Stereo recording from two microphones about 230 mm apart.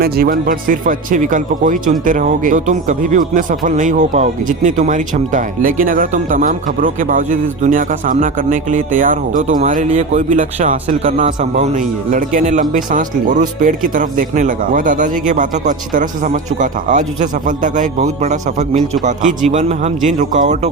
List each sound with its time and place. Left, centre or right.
0.0 s speech: right